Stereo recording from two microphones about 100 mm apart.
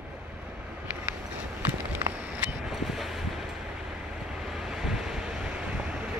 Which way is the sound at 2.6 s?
Centre (ahead or behind).